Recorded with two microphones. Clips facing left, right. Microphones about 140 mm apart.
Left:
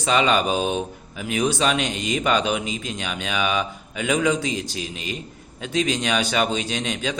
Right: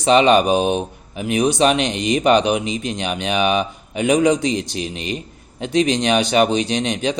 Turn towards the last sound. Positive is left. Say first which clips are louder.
# right 6 dB
turn(degrees=-20)  # may be behind; listen again after turning